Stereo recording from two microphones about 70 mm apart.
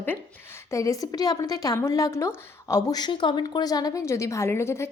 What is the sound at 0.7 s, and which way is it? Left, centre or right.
A woman's voice, left.